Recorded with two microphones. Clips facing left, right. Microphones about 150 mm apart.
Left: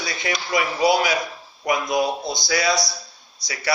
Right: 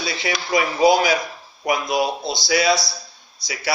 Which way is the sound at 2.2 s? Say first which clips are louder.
Right 3 dB; 25° right (ahead or behind).